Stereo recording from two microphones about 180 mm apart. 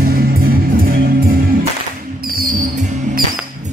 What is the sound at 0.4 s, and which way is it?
Music, 55° right (ahead or behind).